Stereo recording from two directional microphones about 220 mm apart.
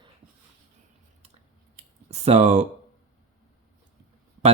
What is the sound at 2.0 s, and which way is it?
Speech, 30° right (ahead or behind).